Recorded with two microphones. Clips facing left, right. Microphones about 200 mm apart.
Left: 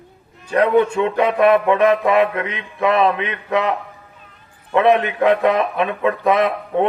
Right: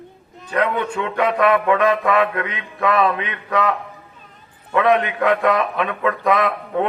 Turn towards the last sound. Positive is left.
turn(degrees=25)  # may be behind; listen again after turning